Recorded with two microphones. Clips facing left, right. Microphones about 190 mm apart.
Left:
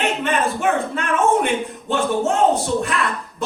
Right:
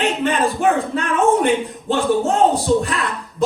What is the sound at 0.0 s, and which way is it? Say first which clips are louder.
A man's voice: right 2 dB; 35° right (ahead or behind).